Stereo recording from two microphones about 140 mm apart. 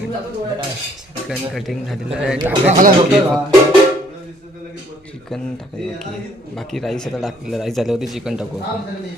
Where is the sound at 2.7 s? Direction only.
70° right (ahead or behind).